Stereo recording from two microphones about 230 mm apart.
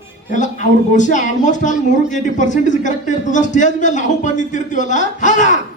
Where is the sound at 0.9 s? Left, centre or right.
Left.